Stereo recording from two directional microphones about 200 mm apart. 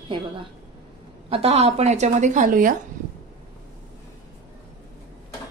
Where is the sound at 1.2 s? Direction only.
30° right (ahead or behind).